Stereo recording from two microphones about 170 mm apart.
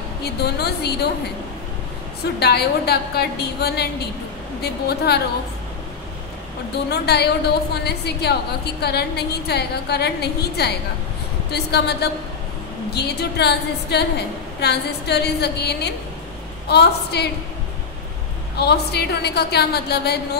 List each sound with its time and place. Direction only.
0.2 s a woman's voice: 70° left (ahead or behind)
2.4 s a woman's voice: 70° left (ahead or behind)
6.9 s a woman's voice: 75° left (ahead or behind)
18.6 s a woman's voice: 75° left (ahead or behind)